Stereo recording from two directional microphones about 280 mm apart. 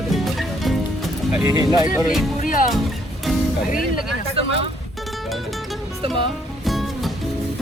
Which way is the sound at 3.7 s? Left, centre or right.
Left.